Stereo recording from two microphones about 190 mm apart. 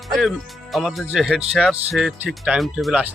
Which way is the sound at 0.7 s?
Centre (ahead or behind).